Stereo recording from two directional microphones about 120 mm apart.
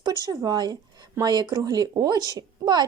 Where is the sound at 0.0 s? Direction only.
35° right (ahead or behind).